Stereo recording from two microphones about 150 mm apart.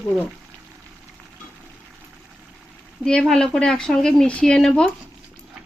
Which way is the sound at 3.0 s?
5° left (ahead or behind).